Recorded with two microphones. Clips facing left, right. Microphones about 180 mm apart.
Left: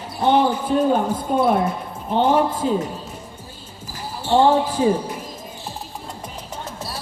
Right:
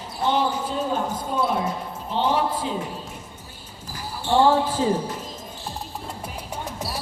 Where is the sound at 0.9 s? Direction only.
55° left (ahead or behind).